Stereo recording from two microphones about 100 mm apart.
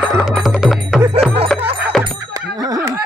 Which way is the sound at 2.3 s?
40° right (ahead or behind).